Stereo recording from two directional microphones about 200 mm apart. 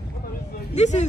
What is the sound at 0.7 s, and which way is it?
Speech, 35° left (ahead or behind).